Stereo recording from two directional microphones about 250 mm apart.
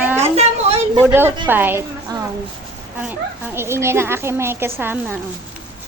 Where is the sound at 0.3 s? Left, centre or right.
Right.